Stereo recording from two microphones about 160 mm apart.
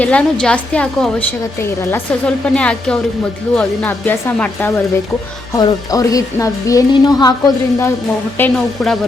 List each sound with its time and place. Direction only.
0.0 s speech: 5° left (ahead or behind)
5.5 s a woman's voice: 20° left (ahead or behind)
8.4 s speech: 5° left (ahead or behind)